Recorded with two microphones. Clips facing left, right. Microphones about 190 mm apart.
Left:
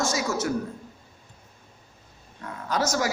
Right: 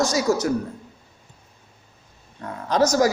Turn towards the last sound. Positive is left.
turn(degrees=-40)  # may be behind; listen again after turning